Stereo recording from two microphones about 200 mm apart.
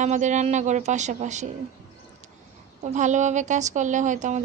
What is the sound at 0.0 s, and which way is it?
A woman's voice, 35° right (ahead or behind).